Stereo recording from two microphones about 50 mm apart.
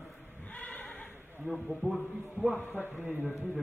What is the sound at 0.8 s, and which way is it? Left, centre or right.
Neigh, left.